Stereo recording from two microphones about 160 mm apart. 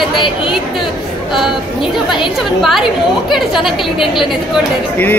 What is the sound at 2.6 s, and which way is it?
A woman's voice, centre (ahead or behind).